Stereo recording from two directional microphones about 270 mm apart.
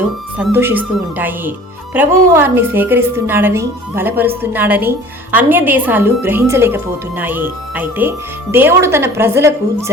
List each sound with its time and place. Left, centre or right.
0.3 s speech: centre